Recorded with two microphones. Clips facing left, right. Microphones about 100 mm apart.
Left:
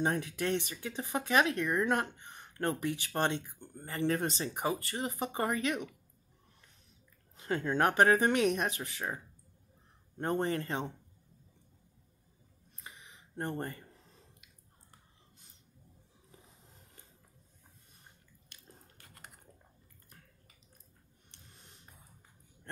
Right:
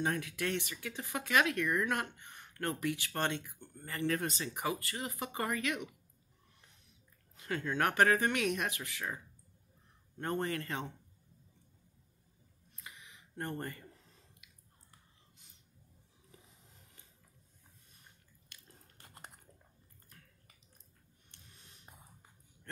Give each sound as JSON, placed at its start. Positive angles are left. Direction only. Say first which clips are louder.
{"t": 0.0, "sound": "speech", "louder": "left 3 dB", "side_deg": 30}
{"t": 7.3, "sound": "speech", "louder": "left 4 dB", "side_deg": 30}
{"t": 12.8, "sound": "a sound", "louder": "left 1 dB", "side_deg": 30}
{"t": 18.9, "sound": "typing", "louder": "right 4 dB", "side_deg": -25}